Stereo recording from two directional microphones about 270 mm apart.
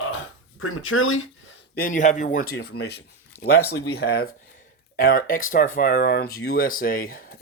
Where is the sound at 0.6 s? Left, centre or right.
Left.